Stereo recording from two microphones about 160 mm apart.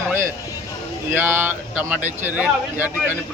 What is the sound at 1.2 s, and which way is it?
Speech, 10° right (ahead or behind).